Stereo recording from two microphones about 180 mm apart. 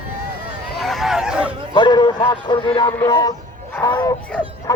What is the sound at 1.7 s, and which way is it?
Speech, 25° left (ahead or behind).